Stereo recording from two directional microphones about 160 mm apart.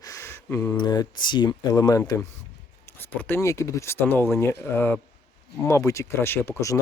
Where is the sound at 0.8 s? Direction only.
25° left (ahead or behind).